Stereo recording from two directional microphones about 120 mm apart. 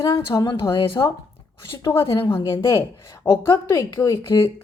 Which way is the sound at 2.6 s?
25° left (ahead or behind).